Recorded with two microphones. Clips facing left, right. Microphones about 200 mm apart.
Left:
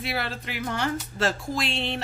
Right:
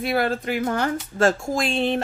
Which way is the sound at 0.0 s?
50° right (ahead or behind).